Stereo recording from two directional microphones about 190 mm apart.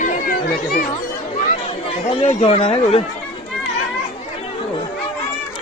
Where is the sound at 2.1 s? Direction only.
35° left (ahead or behind).